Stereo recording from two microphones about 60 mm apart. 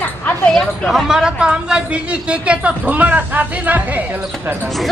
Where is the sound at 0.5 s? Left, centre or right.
Centre; by 4.0 s right.